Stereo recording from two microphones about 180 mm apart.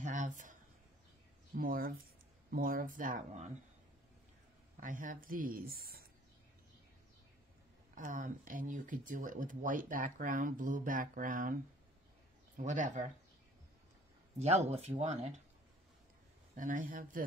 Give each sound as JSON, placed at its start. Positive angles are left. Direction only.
{"t": 0.0, "sound": "a sound", "side_deg": -45}
{"t": 1.5, "sound": "speech", "side_deg": -55}
{"t": 4.7, "sound": "speech", "side_deg": -45}
{"t": 7.9, "sound": "speech", "side_deg": -45}
{"t": 14.4, "sound": "speech", "side_deg": -35}
{"t": 16.5, "sound": "speech", "side_deg": -45}